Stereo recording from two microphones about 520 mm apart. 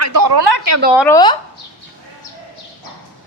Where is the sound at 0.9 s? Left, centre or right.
Centre.